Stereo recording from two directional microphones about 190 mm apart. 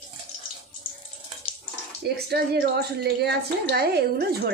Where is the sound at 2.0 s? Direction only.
55° right (ahead or behind).